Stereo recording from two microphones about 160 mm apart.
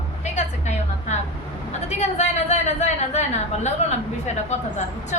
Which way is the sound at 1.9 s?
45° left (ahead or behind).